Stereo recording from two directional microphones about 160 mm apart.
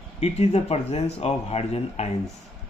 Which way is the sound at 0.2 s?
40° left (ahead or behind).